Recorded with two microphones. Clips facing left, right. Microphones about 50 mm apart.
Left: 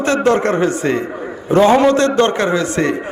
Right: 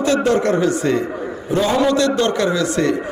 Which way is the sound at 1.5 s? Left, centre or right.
Left.